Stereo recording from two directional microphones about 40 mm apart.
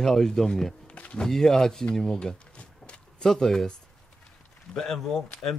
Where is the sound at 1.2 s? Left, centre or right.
Centre.